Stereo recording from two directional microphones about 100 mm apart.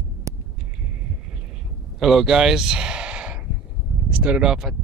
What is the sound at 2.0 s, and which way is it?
Speech, 5° right (ahead or behind).